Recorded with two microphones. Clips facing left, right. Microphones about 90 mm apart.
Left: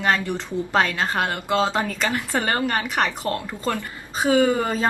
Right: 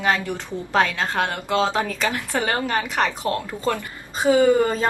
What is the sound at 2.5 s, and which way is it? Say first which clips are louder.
Speech: left 1 dB; centre (ahead or behind).